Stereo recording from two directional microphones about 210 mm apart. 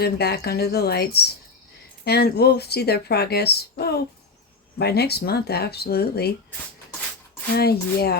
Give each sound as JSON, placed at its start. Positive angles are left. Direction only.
{"t": 0.0, "sound": "speech", "side_deg": 50}
{"t": 7.5, "sound": "speech", "side_deg": 50}